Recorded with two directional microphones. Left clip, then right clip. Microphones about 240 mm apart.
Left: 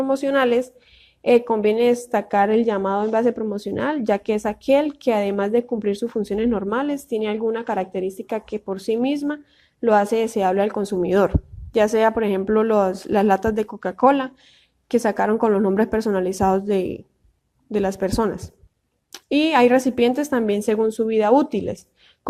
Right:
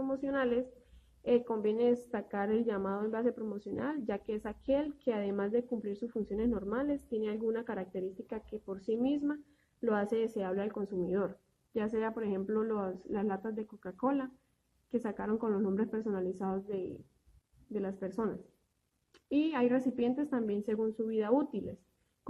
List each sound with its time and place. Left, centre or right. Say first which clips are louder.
0.0 s a woman's voice: left 15 dB; left